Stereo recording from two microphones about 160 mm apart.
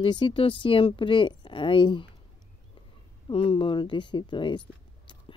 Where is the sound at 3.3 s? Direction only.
35° left (ahead or behind).